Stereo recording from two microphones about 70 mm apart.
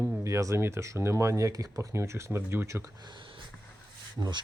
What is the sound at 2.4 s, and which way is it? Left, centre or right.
Speech, right.